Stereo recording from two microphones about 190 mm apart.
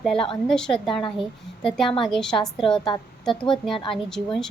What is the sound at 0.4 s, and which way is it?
A woman's voice, centre (ahead or behind).